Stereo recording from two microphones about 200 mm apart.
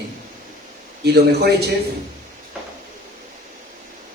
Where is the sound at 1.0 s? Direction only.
55° right (ahead or behind).